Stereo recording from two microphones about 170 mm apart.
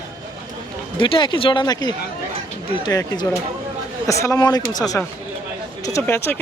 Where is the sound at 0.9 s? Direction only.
30° left (ahead or behind).